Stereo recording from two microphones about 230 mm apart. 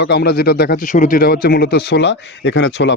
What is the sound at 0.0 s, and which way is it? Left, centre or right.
A man's voice, left.